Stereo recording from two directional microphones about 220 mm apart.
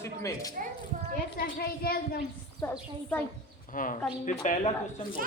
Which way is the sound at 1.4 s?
45° left (ahead or behind).